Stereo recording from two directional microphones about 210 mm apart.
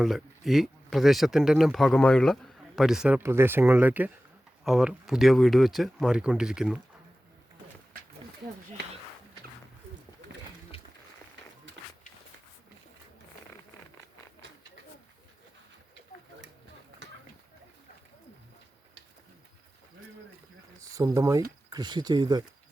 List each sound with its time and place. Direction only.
0.0 s speech: centre (ahead or behind)
20.9 s speech: 15° right (ahead or behind)